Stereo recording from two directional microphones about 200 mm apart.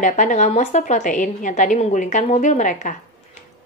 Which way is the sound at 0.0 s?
40° left (ahead or behind).